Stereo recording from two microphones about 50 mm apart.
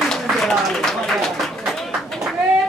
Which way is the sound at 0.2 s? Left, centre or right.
Centre.